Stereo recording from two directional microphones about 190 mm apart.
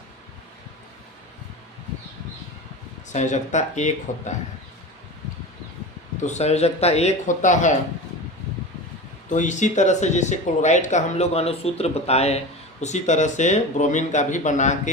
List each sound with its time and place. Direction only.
3.1 s speech: 40° left (ahead or behind)
6.2 s speech: 35° left (ahead or behind)
9.3 s speech: 40° left (ahead or behind)